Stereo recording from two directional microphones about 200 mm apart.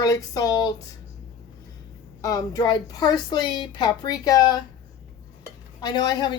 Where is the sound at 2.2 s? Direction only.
15° left (ahead or behind).